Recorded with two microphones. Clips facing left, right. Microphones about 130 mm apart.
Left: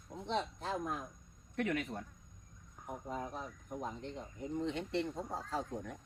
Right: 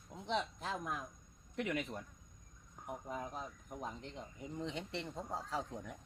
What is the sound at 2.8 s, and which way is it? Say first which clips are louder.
Cricket: even; 25° right (ahead or behind).